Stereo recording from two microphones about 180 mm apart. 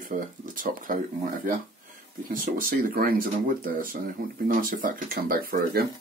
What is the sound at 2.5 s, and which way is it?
Speech, 55° right (ahead or behind).